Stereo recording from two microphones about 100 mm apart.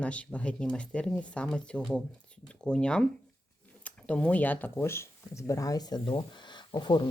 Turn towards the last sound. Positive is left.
turn(degrees=45)  # may be behind; listen again after turning